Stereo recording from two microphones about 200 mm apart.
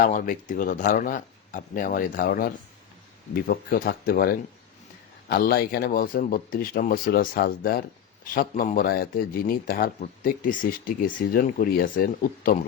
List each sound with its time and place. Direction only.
0.0 s speech: 45° left (ahead or behind)